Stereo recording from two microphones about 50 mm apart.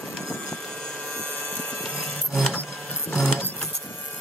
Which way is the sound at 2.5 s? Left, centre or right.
Left.